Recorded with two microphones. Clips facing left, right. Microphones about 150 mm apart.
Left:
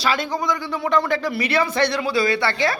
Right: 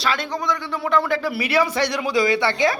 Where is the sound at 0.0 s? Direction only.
Centre (ahead or behind).